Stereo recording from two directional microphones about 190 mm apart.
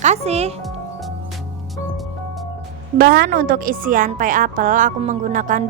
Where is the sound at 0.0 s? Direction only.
35° right (ahead or behind).